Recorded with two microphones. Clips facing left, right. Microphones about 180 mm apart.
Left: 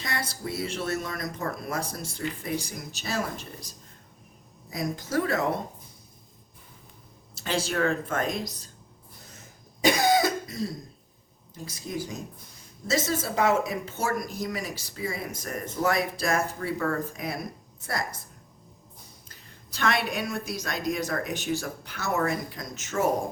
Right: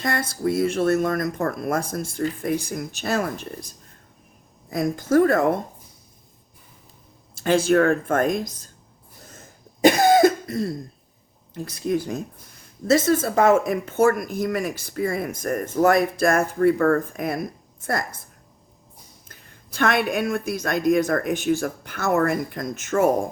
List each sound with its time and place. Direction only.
0.0 s speech: 50° right (ahead or behind)
4.7 s speech: 50° right (ahead or behind)
7.3 s speech: 50° right (ahead or behind)
9.8 s cough: 55° right (ahead or behind)
11.5 s speech: 65° right (ahead or behind)
19.3 s speech: 55° right (ahead or behind)